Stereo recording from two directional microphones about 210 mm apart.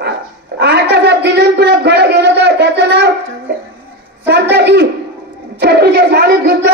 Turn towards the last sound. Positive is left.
turn(degrees=-50)  # may be behind; listen again after turning